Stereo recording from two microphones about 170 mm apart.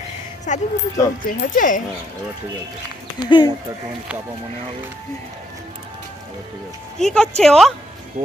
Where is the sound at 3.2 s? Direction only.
30° left (ahead or behind).